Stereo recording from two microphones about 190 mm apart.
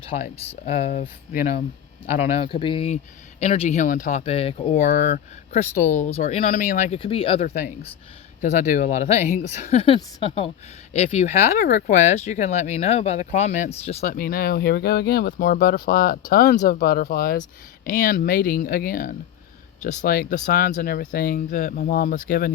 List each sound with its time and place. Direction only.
0.5 s speech: 40° left (ahead or behind)
2.3 s speech: 30° left (ahead or behind)
4.2 s speech: 30° left (ahead or behind)
6.5 s speech: 45° left (ahead or behind); by 7.4 s 30° left (ahead or behind)
8.4 s speech: 40° left (ahead or behind)